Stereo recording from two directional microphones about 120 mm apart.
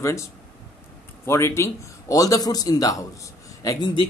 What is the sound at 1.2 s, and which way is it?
A man's voice, 20° left (ahead or behind).